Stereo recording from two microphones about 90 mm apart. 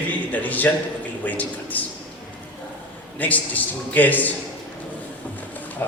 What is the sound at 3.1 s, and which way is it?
A man's voice, 20° left (ahead or behind).